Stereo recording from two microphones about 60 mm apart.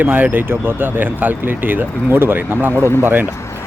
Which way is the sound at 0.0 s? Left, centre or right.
Right.